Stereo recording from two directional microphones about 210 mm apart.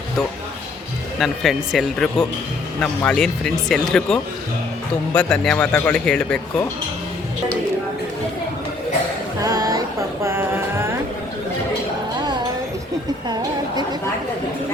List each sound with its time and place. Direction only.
1.2 s speech: centre (ahead or behind)
9.4 s a sound: 15° right (ahead or behind)
10.2 s music: 10° right (ahead or behind)